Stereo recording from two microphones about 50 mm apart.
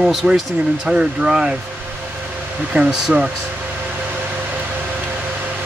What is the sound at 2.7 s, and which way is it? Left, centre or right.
Speech, right.